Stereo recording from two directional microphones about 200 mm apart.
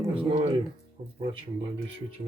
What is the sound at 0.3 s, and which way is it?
Speech, 30° right (ahead or behind).